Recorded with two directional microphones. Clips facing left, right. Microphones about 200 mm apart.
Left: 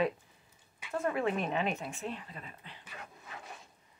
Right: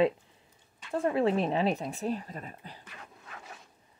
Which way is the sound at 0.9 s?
30° right (ahead or behind).